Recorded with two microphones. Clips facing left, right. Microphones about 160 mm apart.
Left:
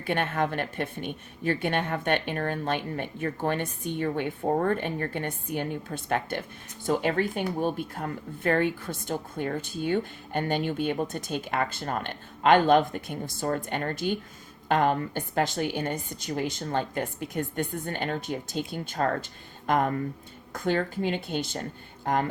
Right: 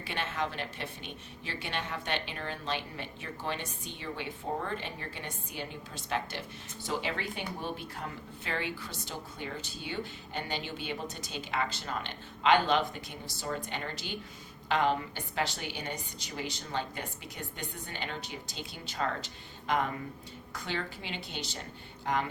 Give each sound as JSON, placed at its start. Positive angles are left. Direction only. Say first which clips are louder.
{"t": 0.0, "sound": "speech", "louder": "left 8 dB", "side_deg": 55}